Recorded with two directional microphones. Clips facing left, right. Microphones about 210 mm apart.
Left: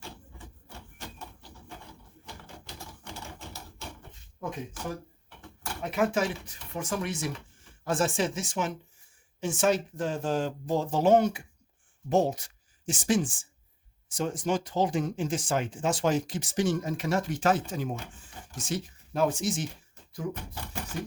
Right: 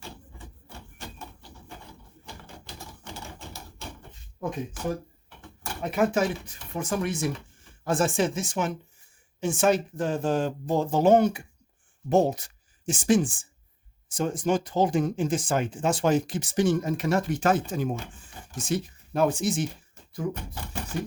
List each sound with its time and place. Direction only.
5.8 s speech: 45° right (ahead or behind)